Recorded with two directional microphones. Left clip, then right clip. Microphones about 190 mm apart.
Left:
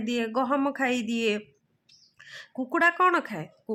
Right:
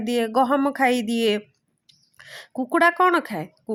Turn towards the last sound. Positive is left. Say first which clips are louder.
# right 5 dB
turn(degrees=-25)  # may be behind; listen again after turning